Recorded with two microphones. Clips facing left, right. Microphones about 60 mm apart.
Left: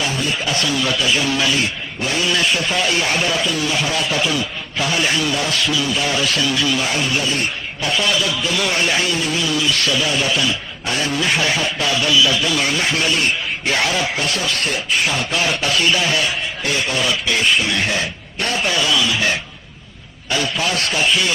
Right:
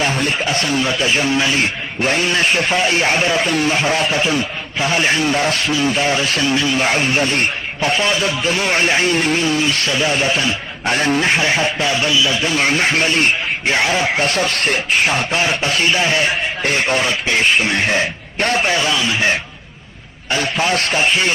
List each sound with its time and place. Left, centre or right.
0.0 s a sound: right
0.4 s a man's voice: right
3.4 s a man's voice: right
7.8 s a man's voice: right
9.1 s a man's voice: right